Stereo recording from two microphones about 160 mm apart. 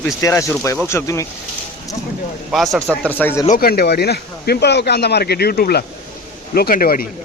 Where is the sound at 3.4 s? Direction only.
60° left (ahead or behind).